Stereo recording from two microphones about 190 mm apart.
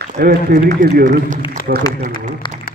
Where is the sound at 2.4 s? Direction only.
25° left (ahead or behind).